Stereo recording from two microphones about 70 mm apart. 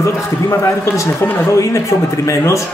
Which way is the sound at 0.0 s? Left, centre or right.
Left.